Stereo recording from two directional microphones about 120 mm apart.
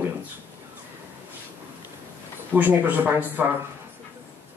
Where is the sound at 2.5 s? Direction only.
15° right (ahead or behind).